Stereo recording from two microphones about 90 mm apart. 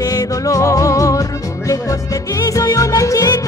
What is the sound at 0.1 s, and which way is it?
Music, 35° left (ahead or behind).